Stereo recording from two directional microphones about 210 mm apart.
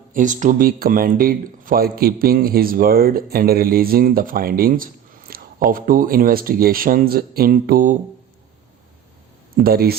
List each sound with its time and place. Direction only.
0.1 s speech: 40° right (ahead or behind)
9.6 s speech: 45° right (ahead or behind)